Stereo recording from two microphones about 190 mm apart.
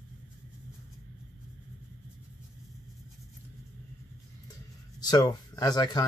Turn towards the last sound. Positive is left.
turn(degrees=20)  # may be behind; listen again after turning